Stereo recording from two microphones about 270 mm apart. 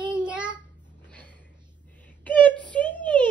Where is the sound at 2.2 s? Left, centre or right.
Centre.